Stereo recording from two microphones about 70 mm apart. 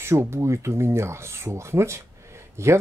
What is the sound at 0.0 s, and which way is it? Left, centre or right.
Speech, right.